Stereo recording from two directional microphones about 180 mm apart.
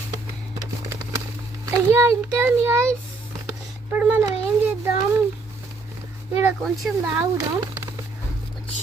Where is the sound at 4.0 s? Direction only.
10° right (ahead or behind).